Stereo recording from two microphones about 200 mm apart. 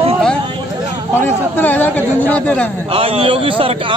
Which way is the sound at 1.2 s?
10° left (ahead or behind).